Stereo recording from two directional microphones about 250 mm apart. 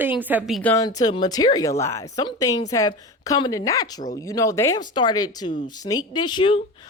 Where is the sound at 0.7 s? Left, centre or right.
Centre.